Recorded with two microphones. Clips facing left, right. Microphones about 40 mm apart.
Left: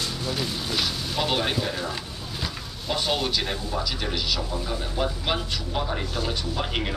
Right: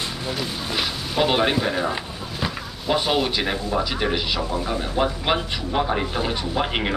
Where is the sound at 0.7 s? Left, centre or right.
Right.